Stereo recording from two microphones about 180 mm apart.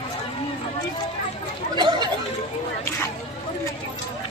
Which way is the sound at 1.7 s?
25° right (ahead or behind).